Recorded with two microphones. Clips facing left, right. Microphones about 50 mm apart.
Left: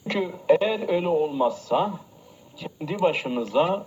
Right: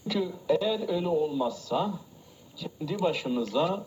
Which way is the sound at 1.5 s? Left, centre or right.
Left.